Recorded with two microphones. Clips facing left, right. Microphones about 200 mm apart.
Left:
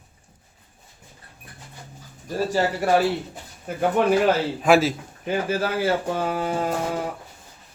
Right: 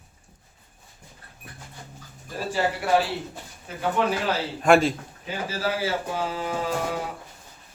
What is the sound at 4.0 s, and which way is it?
Speech, 55° left (ahead or behind).